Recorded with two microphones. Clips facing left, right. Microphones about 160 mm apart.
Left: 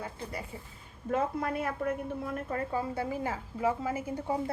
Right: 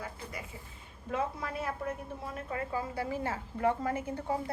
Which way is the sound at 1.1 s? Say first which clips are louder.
Left 4 dB; 55° left (ahead or behind).